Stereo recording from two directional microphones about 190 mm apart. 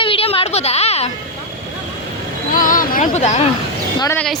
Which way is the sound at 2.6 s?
45° left (ahead or behind).